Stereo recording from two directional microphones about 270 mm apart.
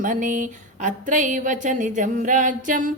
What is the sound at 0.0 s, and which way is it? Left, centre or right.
Speech, right.